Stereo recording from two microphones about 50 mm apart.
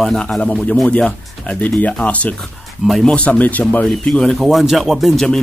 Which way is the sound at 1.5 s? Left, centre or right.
Left.